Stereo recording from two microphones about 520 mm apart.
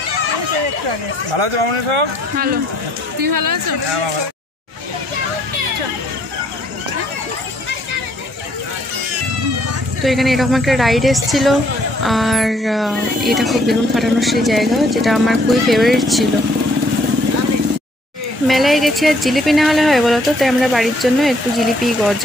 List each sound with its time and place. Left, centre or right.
1.3 s speech: right
3.2 s a woman's voice: right
10.0 s speech: centre
18.5 s speech: centre